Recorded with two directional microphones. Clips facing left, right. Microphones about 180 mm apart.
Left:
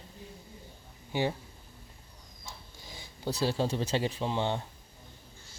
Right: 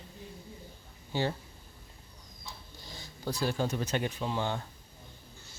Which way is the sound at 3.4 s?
30° left (ahead or behind).